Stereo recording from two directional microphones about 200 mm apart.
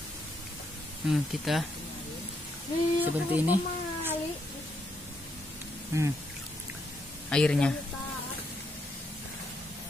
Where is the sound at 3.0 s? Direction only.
10° right (ahead or behind).